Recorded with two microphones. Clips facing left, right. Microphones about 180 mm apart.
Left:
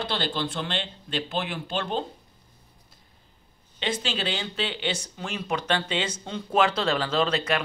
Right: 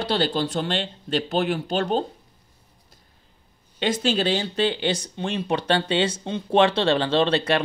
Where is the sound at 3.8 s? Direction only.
45° right (ahead or behind).